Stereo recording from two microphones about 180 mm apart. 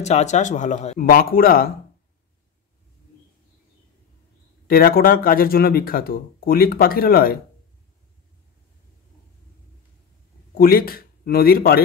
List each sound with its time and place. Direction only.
0.0 s speech: 40° left (ahead or behind)
0.9 s speech: 55° left (ahead or behind)
4.6 s speech: 55° left (ahead or behind)
10.5 s speech: 55° left (ahead or behind)